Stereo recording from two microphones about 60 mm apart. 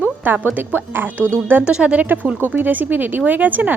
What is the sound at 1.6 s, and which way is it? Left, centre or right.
Speech, centre.